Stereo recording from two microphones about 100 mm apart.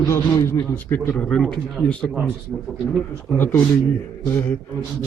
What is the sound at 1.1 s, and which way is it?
Speech, 10° left (ahead or behind).